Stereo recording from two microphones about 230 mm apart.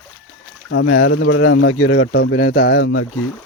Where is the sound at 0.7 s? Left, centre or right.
Left.